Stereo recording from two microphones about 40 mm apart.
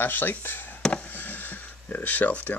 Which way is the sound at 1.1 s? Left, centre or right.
Left.